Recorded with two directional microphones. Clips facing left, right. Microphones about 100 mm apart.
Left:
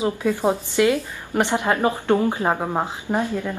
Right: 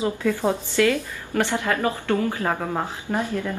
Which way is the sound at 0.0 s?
15° left (ahead or behind).